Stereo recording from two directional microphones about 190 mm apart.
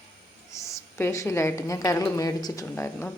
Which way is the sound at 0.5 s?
15° left (ahead or behind).